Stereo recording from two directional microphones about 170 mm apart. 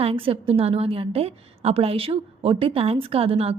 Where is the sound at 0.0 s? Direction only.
35° right (ahead or behind).